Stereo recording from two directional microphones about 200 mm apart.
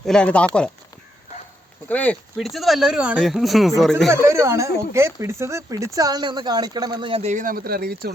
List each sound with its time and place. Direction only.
0.0 s speech: 5° left (ahead or behind)
1.9 s speech: 10° left (ahead or behind)
4.1 s speech: 15° right (ahead or behind); by 8.1 s 50° right (ahead or behind)